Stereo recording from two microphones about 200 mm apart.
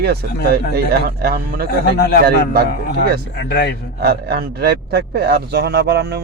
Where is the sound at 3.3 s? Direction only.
55° left (ahead or behind).